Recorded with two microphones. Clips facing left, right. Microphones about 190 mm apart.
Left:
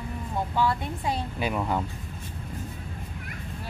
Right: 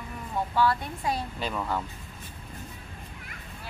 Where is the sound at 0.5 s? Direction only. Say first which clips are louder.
Right 1 dB; 20° left (ahead or behind).